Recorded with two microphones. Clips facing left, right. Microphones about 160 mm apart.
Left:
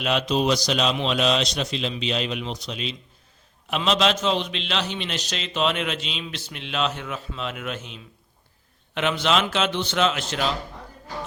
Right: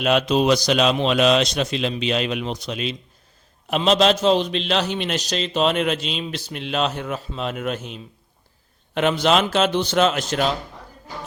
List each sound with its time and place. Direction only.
0.0 s a man's voice: 50° right (ahead or behind)
3.7 s a man's voice: 40° right (ahead or behind)
9.0 s a man's voice: 40° right (ahead or behind)